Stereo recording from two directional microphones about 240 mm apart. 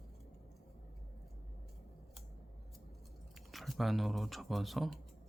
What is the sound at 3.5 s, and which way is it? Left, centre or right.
Speech, centre.